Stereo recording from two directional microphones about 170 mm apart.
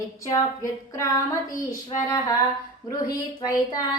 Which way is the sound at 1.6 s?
20° left (ahead or behind).